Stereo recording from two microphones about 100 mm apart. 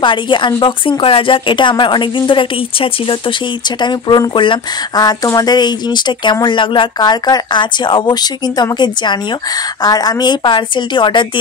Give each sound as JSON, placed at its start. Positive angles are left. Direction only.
{"t": 0.0, "sound": "speech", "side_deg": 55}
{"t": 3.8, "sound": "speech", "side_deg": 50}
{"t": 4.9, "sound": "speech", "side_deg": 40}